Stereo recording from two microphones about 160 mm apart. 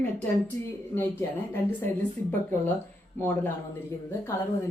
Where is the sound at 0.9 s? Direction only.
15° left (ahead or behind).